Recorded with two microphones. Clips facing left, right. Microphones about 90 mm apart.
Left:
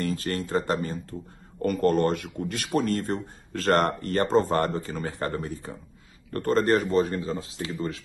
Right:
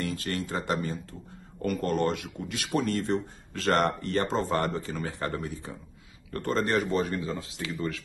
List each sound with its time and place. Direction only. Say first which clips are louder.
0.0 s speech: left 3 dB; 40° left (ahead or behind)